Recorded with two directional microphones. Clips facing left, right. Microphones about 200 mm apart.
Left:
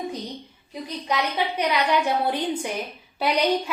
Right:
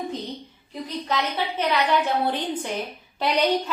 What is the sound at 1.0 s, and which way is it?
A woman's voice, 15° left (ahead or behind).